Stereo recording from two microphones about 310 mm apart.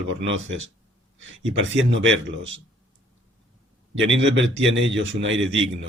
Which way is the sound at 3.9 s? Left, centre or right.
Right.